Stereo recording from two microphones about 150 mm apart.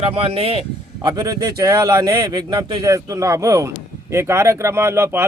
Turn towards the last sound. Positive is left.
turn(degrees=-15)  # may be behind; listen again after turning